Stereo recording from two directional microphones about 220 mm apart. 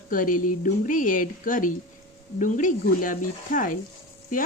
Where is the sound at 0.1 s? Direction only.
40° left (ahead or behind).